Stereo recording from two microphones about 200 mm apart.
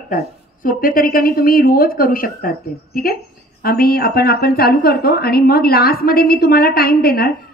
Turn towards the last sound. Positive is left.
turn(degrees=50)  # may be behind; listen again after turning